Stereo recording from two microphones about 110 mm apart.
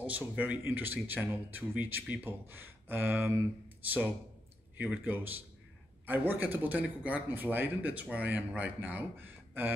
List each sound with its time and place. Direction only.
0.0 s speech: 15° right (ahead or behind)